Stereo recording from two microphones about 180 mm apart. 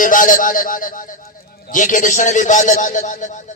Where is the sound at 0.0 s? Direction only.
45° left (ahead or behind).